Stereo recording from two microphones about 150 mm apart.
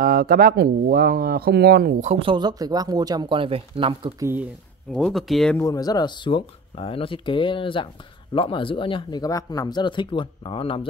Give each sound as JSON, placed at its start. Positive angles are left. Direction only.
{"t": 0.0, "sound": "speech", "side_deg": -80}
{"t": 2.0, "sound": "speech", "side_deg": -50}
{"t": 2.2, "sound": "speech", "side_deg": -30}
{"t": 4.2, "sound": "speech", "side_deg": -15}
{"t": 4.9, "sound": "speech", "side_deg": 0}
{"t": 5.6, "sound": "speech", "side_deg": 25}